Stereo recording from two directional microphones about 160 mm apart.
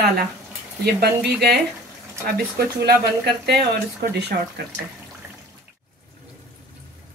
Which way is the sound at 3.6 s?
85° right.